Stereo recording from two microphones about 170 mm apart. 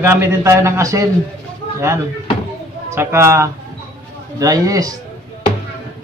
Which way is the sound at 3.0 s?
15° right (ahead or behind).